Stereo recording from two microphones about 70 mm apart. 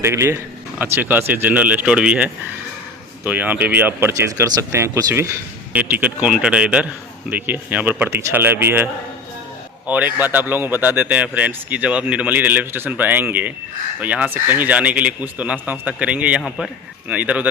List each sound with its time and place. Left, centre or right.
0.0 s a man's voice: right
0.8 s a man's voice: right
4.2 s a man's voice: right
5.7 s a man's voice: right
7.3 s a man's voice: right